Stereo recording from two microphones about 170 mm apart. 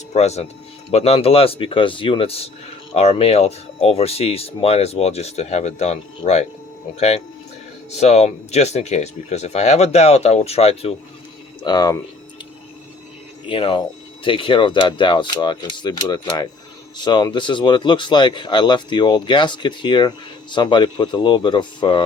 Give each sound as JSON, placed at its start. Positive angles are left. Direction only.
{"t": 0.1, "sound": "speech", "side_deg": 40}
{"t": 7.9, "sound": "speech", "side_deg": 40}
{"t": 11.6, "sound": "speech", "side_deg": 25}
{"t": 13.5, "sound": "speech", "side_deg": 30}